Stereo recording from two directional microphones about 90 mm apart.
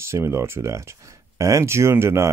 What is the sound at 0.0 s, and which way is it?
Speech, 30° right (ahead or behind).